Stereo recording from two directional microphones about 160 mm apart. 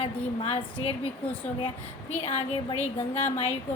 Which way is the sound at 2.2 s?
40° left (ahead or behind).